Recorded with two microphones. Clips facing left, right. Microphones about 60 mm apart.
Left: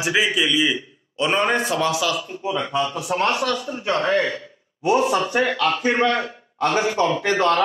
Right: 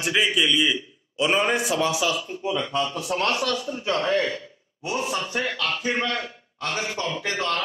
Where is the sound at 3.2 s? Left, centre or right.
Left.